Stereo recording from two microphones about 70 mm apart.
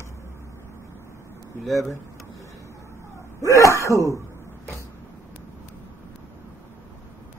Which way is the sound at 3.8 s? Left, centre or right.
Left.